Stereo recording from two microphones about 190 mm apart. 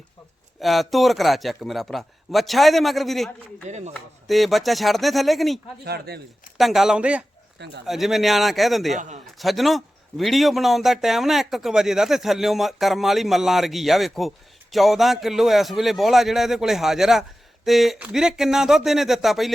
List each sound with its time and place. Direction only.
0.6 s a man's voice: centre (ahead or behind)
3.7 s a man's voice: 35° right (ahead or behind)
4.3 s a man's voice: centre (ahead or behind)
5.8 s speech: 60° right (ahead or behind)
6.6 s a man's voice: centre (ahead or behind)
9.0 s a man's voice: 40° right (ahead or behind)
9.4 s a man's voice: centre (ahead or behind)